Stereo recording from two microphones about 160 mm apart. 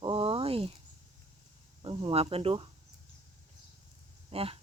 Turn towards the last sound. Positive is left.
turn(degrees=-35)  # may be behind; listen again after turning